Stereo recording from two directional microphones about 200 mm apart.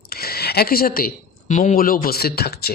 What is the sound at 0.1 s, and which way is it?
A woman's voice, 50° left (ahead or behind).